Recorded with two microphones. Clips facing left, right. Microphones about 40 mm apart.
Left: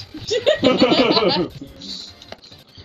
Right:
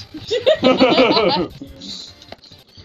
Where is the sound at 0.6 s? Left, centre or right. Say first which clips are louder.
Right 2 dB; centre.